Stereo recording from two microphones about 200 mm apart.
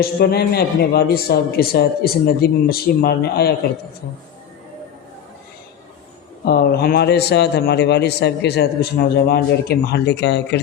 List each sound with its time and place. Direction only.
0.0 s a man's voice: 50° left (ahead or behind)
6.4 s a man's voice: 50° left (ahead or behind)